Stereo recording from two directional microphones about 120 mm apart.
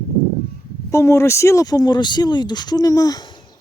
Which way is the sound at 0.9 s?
25° left (ahead or behind).